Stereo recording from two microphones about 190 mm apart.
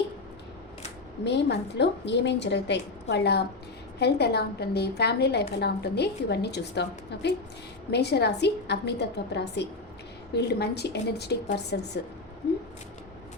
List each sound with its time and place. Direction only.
1.2 s a woman's voice: 65° left (ahead or behind)